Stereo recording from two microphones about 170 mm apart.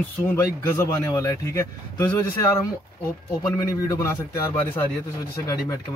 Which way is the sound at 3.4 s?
20° left (ahead or behind).